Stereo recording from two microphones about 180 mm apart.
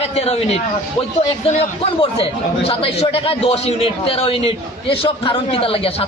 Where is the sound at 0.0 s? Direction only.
35° left (ahead or behind).